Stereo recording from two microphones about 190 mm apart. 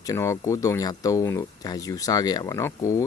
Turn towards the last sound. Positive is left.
turn(degrees=15)  # may be behind; listen again after turning